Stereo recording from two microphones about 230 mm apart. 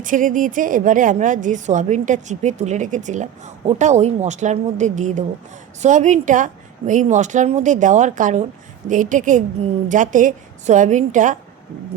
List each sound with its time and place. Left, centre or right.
0.0 s a woman's voice: right